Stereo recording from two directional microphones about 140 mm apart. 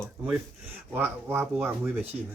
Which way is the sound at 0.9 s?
15° right (ahead or behind).